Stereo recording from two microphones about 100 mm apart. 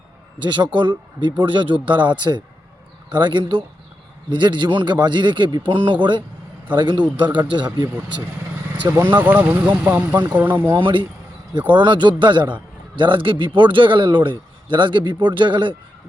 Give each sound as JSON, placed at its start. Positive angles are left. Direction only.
{"t": 0.5, "sound": "speech", "side_deg": -55}
{"t": 8.8, "sound": "speech", "side_deg": -25}
{"t": 10.8, "sound": "a man's voice", "side_deg": -55}